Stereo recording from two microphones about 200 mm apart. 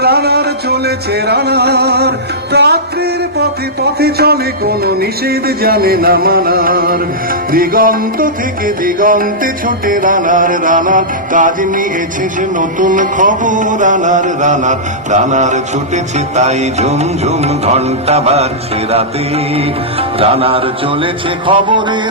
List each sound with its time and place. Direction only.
0.0 s a sound: 50° right (ahead or behind)
4.0 s music: 50° right (ahead or behind); by 18.4 s 30° right (ahead or behind)
19.5 s music: 30° right (ahead or behind)